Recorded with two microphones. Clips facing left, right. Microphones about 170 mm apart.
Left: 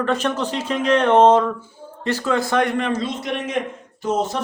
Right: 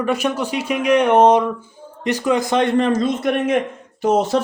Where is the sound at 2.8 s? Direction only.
35° right (ahead or behind).